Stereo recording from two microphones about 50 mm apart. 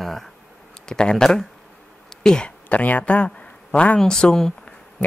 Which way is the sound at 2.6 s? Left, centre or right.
Left.